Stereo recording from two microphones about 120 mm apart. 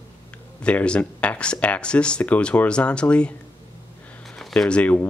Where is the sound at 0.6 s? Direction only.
10° left (ahead or behind).